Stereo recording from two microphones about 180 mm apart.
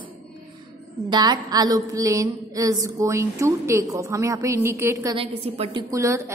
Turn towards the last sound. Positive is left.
turn(degrees=-15)  # may be behind; listen again after turning